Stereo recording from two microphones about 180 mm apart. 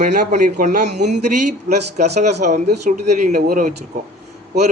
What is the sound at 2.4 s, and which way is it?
A man's voice, 50° right (ahead or behind).